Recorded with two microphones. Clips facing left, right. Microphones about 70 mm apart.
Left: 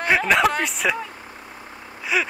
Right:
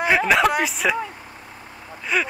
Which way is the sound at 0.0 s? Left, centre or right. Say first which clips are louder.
Right 1 dB; centre.